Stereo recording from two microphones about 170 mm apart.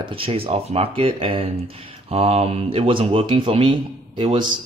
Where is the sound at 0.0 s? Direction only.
30° right (ahead or behind).